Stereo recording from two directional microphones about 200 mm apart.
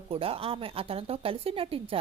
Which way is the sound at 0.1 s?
30° right (ahead or behind).